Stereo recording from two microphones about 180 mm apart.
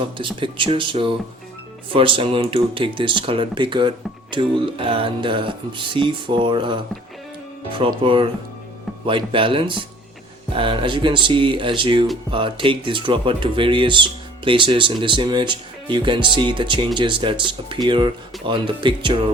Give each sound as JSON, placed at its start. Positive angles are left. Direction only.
{"t": 0.0, "sound": "speech", "side_deg": -30}
{"t": 7.8, "sound": "speech", "side_deg": -30}